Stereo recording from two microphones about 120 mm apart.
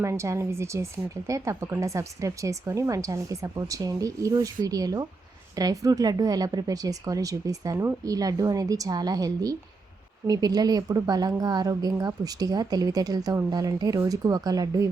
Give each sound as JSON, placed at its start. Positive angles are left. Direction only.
{"t": 0.0, "sound": "a woman's voice", "side_deg": -25}